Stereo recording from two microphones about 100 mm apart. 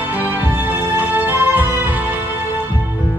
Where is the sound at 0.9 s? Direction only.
20° right (ahead or behind).